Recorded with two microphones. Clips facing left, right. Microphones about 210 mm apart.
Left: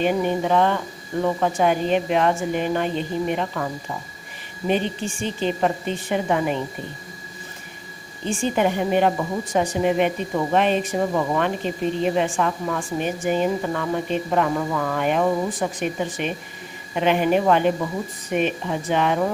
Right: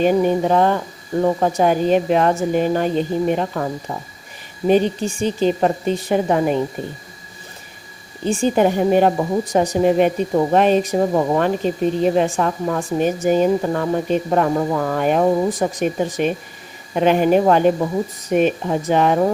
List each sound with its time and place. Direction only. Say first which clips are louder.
0.0 s a woman's voice: right 5 dB; 40° right (ahead or behind)
8.3 s a woman's voice: right 5 dB; 40° right (ahead or behind)